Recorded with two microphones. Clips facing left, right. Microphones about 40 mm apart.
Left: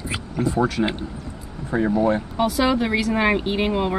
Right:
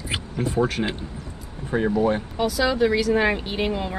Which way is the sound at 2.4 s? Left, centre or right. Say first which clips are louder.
Even; left.